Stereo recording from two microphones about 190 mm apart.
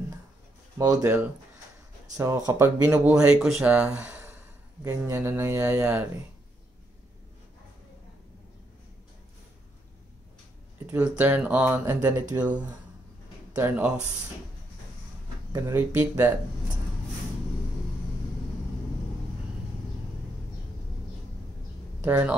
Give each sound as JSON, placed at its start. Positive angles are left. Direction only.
{"t": 0.7, "sound": "speech", "side_deg": -20}
{"t": 2.9, "sound": "speech", "side_deg": -5}
{"t": 10.9, "sound": "speech", "side_deg": -10}
{"t": 13.6, "sound": "speech", "side_deg": -10}
{"t": 15.5, "sound": "speech", "side_deg": -10}
{"t": 22.0, "sound": "speech", "side_deg": -10}